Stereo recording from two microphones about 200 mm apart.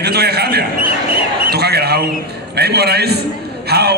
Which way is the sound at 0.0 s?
55° right (ahead or behind).